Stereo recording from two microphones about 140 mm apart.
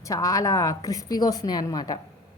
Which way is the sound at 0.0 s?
25° left (ahead or behind).